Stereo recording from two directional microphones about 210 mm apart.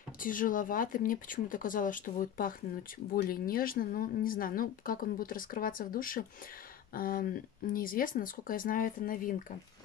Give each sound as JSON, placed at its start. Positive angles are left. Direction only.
{"t": 0.2, "sound": "speech", "side_deg": 40}